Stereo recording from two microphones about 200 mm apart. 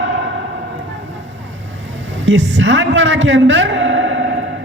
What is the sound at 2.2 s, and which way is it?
A man's voice, 65° right (ahead or behind).